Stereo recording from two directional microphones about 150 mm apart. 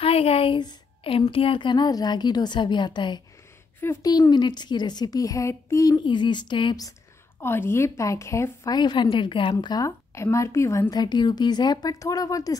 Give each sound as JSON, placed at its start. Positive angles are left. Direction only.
{"t": 0.0, "sound": "a woman's voice", "side_deg": 40}
{"t": 3.8, "sound": "a woman's voice", "side_deg": 15}
{"t": 4.1, "sound": "a woman's voice", "side_deg": 30}
{"t": 7.3, "sound": "a woman's voice", "side_deg": 15}
{"t": 8.7, "sound": "a woman's voice", "side_deg": 30}